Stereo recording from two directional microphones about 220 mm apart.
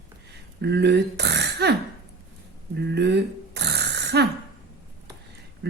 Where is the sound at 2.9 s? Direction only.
50° right (ahead or behind).